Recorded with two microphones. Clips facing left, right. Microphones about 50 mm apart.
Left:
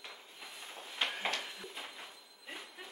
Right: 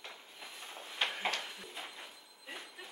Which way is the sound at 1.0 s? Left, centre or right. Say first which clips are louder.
Right 1 dB; centre.